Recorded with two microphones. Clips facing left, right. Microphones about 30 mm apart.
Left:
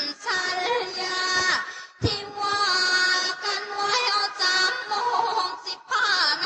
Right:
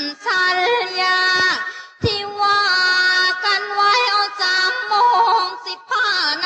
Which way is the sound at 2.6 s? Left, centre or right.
Right.